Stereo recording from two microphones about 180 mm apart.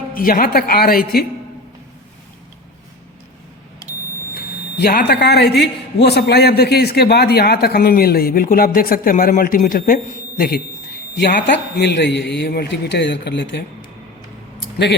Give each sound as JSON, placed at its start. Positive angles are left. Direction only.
{"t": 0.1, "sound": "a man's voice", "side_deg": 50}
{"t": 4.4, "sound": "a man's voice", "side_deg": 55}
{"t": 11.1, "sound": "a man's voice", "side_deg": 70}